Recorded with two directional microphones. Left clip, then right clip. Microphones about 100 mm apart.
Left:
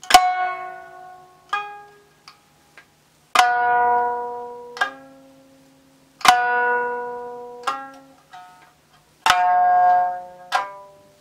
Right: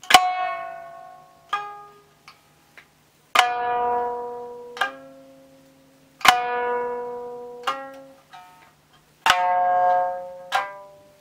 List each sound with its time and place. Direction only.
0.0 s music: 15° left (ahead or behind)
3.3 s a sound: 15° left (ahead or behind)
4.1 s music: 5° left (ahead or behind)
6.1 s music: 20° left (ahead or behind); by 10.3 s 5° left (ahead or behind)